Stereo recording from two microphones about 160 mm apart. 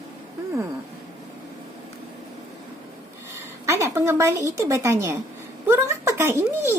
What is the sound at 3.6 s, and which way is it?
A woman's voice, 15° right (ahead or behind).